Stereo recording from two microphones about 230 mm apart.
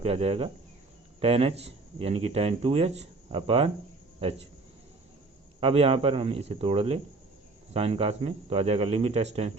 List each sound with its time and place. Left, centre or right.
0.0 s speech: right
5.5 s speech: right